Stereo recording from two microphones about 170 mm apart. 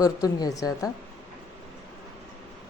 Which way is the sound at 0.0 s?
20° left (ahead or behind).